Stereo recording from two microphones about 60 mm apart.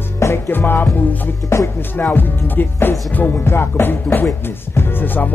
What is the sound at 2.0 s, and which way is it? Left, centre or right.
Music, left.